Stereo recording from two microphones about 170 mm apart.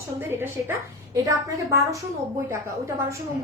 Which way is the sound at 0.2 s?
15° right (ahead or behind).